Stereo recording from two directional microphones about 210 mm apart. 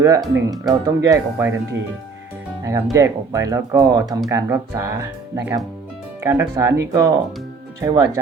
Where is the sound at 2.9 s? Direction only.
15° right (ahead or behind).